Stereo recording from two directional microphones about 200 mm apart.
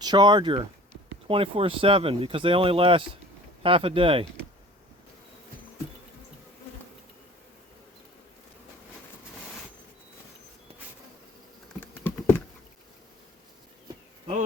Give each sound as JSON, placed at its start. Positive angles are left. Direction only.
{"t": 0.0, "sound": "speech", "side_deg": -20}
{"t": 11.8, "sound": "computer keyboard", "side_deg": 10}